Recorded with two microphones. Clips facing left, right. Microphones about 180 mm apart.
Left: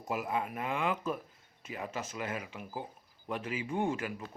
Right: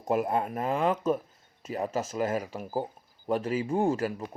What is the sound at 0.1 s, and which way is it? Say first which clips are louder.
Speech: right 7 dB; 50° right (ahead or behind).